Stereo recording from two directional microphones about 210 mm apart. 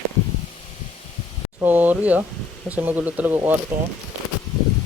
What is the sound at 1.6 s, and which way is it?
Speech, 10° right (ahead or behind).